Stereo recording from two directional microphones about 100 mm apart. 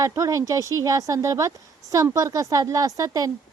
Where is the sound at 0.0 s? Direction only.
35° right (ahead or behind).